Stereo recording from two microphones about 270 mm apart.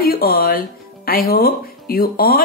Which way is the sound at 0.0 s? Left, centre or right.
Left.